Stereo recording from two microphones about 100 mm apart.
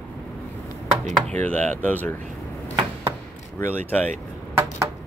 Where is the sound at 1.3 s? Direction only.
15° left (ahead or behind).